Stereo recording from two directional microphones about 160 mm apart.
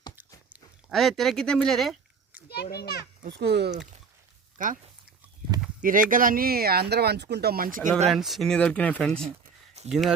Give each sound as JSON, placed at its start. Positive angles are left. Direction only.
{"t": 0.5, "sound": "speech", "side_deg": 0}
{"t": 2.5, "sound": "a child's voice", "side_deg": 85}
{"t": 3.2, "sound": "speech", "side_deg": -90}
{"t": 4.5, "sound": "speech", "side_deg": -55}
{"t": 5.8, "sound": "speech", "side_deg": -60}
{"t": 8.1, "sound": "speech", "side_deg": 0}